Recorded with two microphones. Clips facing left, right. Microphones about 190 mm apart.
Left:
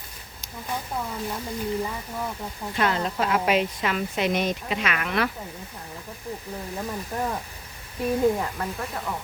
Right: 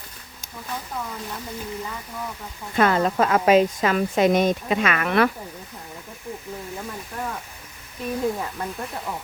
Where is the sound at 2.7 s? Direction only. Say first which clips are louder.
Right 6 dB; 50° right (ahead or behind).